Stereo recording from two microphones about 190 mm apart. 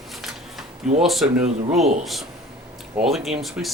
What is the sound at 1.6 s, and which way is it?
Speech, 35° right (ahead or behind).